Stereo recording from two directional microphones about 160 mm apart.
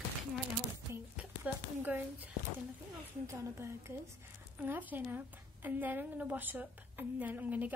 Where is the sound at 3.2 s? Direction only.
15° right (ahead or behind).